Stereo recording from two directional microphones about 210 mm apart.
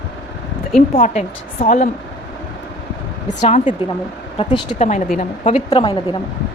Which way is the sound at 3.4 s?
35° left (ahead or behind).